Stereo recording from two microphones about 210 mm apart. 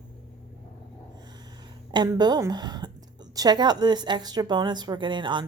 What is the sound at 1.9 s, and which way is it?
A woman's voice, 20° right (ahead or behind).